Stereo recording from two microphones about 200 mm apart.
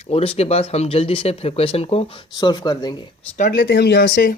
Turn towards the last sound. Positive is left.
turn(degrees=45)  # may be behind; listen again after turning